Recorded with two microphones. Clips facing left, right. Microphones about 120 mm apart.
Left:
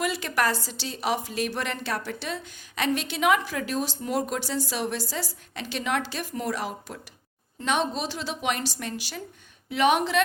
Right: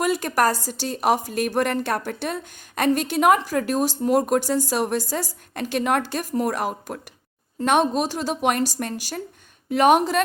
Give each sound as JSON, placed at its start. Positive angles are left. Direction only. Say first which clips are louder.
{"t": 0.0, "sound": "a woman's voice", "louder": "right 5 dB", "side_deg": -45}